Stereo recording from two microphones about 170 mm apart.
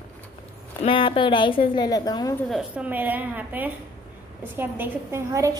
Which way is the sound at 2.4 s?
5° right (ahead or behind).